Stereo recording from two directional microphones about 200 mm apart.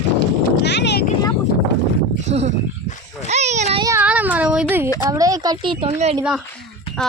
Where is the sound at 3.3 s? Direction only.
35° right (ahead or behind).